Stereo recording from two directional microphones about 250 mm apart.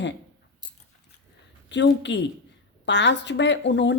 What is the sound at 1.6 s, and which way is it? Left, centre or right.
Speech, left.